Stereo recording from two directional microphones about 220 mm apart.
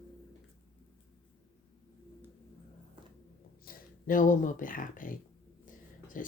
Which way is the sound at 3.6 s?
40° left (ahead or behind).